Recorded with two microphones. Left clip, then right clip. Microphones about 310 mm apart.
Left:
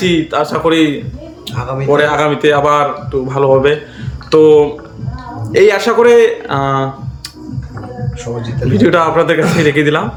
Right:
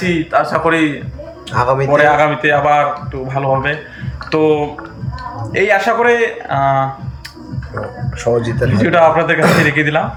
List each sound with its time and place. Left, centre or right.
0.0 s a man's voice: centre
1.5 s a man's voice: centre
1.9 s a man's voice: centre
8.3 s a man's voice: right
8.8 s a man's voice: centre